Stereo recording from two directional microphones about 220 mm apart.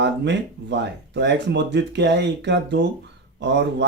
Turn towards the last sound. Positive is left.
turn(degrees=-50)  # may be behind; listen again after turning